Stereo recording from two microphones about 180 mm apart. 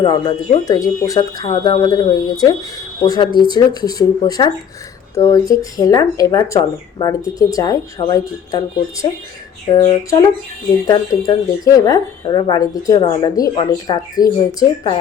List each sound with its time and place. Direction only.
0.0 s speech: 30° left (ahead or behind)
10.8 s speech: 20° left (ahead or behind)